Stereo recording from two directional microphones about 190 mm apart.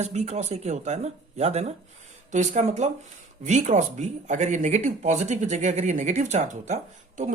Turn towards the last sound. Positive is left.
turn(degrees=-40)  # may be behind; listen again after turning